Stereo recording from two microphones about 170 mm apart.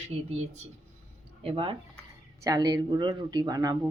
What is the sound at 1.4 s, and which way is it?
Speech, 30° right (ahead or behind).